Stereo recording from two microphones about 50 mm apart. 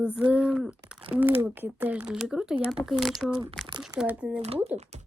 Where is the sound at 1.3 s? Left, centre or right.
Right.